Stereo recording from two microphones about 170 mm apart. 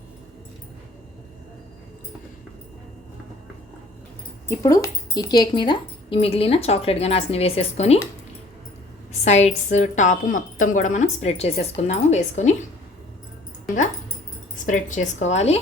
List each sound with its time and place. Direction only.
4.4 s speech: 20° left (ahead or behind); by 7.9 s 35° left (ahead or behind)
9.2 s speech: 40° left (ahead or behind)
14.5 s a woman's voice: 50° left (ahead or behind)